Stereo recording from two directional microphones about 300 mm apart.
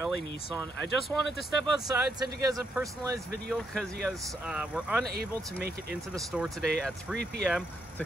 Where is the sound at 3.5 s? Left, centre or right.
Centre.